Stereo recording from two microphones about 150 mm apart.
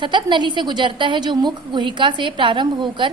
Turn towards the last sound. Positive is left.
turn(degrees=-35)  # may be behind; listen again after turning